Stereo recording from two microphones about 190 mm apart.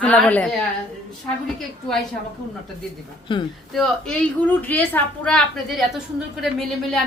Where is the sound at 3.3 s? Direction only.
25° left (ahead or behind).